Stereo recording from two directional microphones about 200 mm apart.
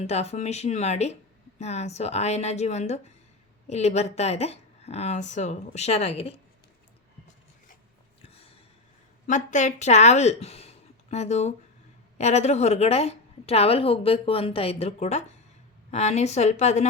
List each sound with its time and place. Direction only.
0.0 s a woman's voice: 35° left (ahead or behind)
8.2 s a sound: 30° left (ahead or behind)
9.2 s a woman's voice: 40° left (ahead or behind)